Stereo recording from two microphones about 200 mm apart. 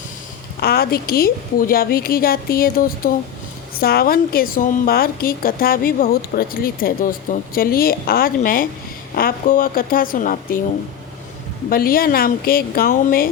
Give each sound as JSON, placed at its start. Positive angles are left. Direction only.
{"t": 0.6, "sound": "a woman's voice", "side_deg": 50}
{"t": 11.7, "sound": "a woman's voice", "side_deg": 45}